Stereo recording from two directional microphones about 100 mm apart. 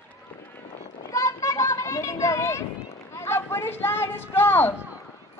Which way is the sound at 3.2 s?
25° left (ahead or behind).